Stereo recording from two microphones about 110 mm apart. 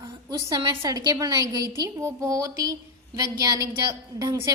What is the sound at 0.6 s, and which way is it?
A woman's voice, 35° right (ahead or behind).